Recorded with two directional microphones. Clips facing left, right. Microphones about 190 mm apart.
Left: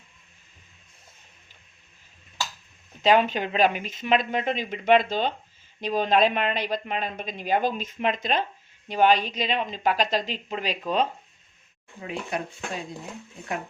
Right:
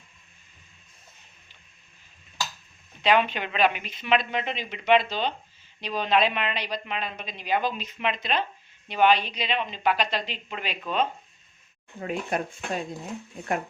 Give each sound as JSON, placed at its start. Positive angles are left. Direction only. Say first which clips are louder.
{"t": 3.0, "sound": "speech", "louder": "left 2 dB", "side_deg": 40}
{"t": 11.9, "sound": "speech", "louder": "right 2 dB", "side_deg": -50}